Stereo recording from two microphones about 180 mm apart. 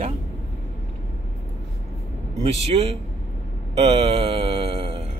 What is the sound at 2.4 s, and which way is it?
Speech, 35° right (ahead or behind).